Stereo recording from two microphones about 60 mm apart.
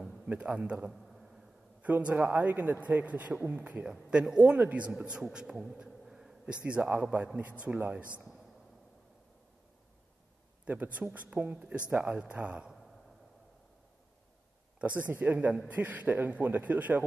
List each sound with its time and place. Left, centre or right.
0.4 s speech: centre
1.0 s a sound: centre
1.8 s a man's voice: right
5.3 s insect: centre
6.4 s a man's voice: right
10.6 s a man's voice: right
14.8 s a man's voice: right